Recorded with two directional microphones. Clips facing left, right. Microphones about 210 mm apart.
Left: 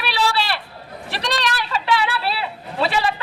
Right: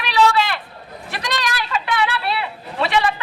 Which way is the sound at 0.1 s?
35° left (ahead or behind).